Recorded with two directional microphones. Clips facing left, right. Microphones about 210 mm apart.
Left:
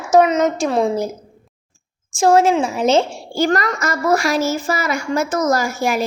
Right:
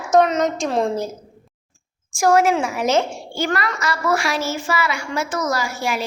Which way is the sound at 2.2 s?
25° left (ahead or behind).